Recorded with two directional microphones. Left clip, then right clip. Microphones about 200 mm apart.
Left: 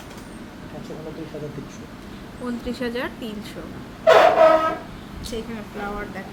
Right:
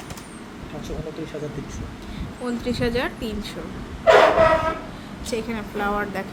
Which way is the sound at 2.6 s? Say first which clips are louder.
Right 4 dB; 15° right (ahead or behind).